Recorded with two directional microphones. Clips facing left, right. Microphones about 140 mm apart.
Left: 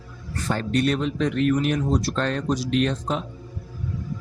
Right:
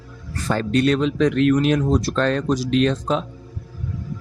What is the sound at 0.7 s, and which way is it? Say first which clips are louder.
Speech: right 4 dB; 90° right.